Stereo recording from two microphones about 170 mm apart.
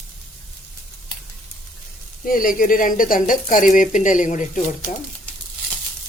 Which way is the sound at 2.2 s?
55° left (ahead or behind).